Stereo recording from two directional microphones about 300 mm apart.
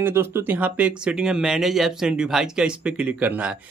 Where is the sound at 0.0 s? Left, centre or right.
Centre.